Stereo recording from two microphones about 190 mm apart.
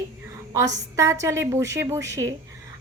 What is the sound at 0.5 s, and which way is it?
Speech, 15° right (ahead or behind).